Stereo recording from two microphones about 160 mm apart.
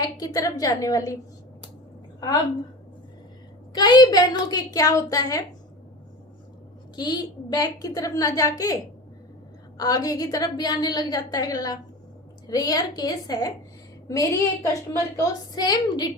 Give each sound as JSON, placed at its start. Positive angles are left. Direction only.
{"t": 0.0, "sound": "a woman's voice", "side_deg": 25}
{"t": 3.7, "sound": "a woman's voice", "side_deg": 25}
{"t": 6.9, "sound": "a woman's voice", "side_deg": 25}